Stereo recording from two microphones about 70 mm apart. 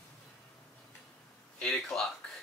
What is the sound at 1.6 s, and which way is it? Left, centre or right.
Speech, centre.